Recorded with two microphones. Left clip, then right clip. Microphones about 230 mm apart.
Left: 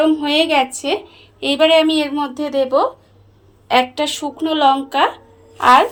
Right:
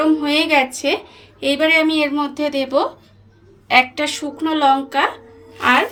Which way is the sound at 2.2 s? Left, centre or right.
Left.